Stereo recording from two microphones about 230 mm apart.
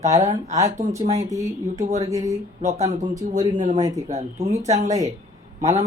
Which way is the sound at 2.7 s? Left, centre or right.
Right.